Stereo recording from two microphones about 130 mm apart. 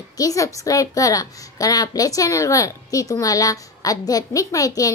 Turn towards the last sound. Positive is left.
turn(degrees=25)  # may be behind; listen again after turning